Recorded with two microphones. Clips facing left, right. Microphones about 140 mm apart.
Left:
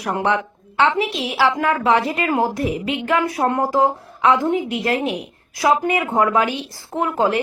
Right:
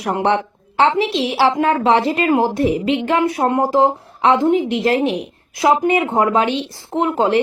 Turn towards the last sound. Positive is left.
turn(degrees=-25)  # may be behind; listen again after turning